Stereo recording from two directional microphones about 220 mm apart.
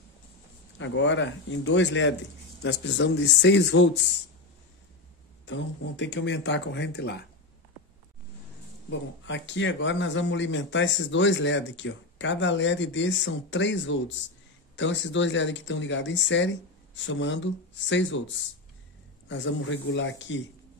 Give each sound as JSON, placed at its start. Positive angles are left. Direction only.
{"t": 0.7, "sound": "a man's voice", "side_deg": 55}
{"t": 5.4, "sound": "speech", "side_deg": 55}
{"t": 9.2, "sound": "a man's voice", "side_deg": 55}